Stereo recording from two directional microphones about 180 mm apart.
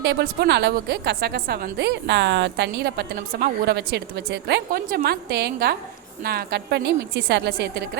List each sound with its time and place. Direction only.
0.0 s a woman's voice: 70° right (ahead or behind)